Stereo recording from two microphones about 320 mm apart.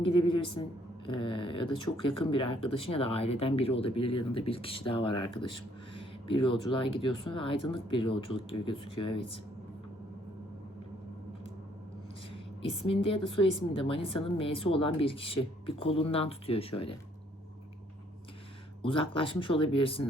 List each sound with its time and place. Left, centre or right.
0.0 s a woman's voice: centre
12.3 s a woman's voice: centre
18.8 s a woman's voice: centre